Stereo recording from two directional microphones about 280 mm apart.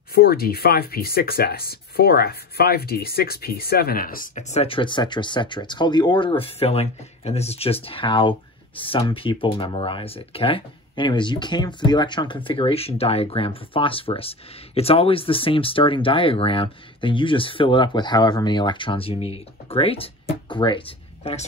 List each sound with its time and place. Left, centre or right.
0.1 s speech: left